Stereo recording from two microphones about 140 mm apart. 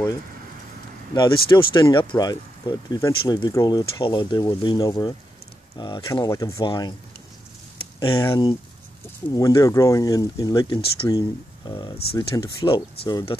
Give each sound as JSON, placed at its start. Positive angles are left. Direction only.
{"t": 1.1, "sound": "speech", "side_deg": 35}
{"t": 8.0, "sound": "speech", "side_deg": 25}